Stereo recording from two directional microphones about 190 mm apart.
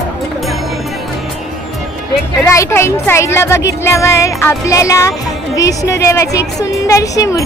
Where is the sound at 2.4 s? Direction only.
15° left (ahead or behind).